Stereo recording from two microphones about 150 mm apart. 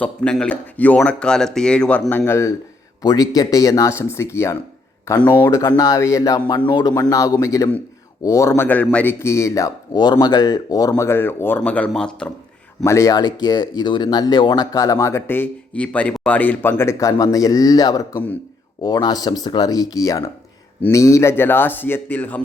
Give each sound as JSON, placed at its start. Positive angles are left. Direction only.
{"t": 0.0, "sound": "speech", "side_deg": 5}
{"t": 12.8, "sound": "speech", "side_deg": 20}